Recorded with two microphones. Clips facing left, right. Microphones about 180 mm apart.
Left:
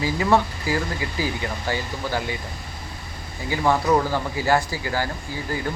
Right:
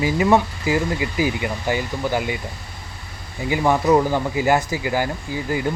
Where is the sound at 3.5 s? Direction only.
15° right (ahead or behind).